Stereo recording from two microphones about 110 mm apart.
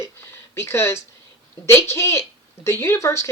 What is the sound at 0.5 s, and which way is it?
Speech, 25° left (ahead or behind).